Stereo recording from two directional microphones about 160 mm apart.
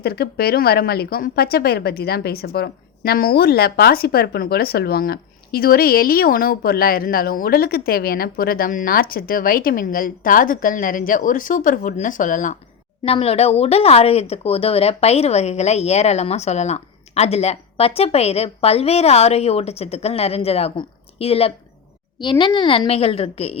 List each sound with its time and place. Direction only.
0.0 s speech: 80° left; by 12.5 s 55° left (ahead or behind)
13.1 s speech: 40° left (ahead or behind)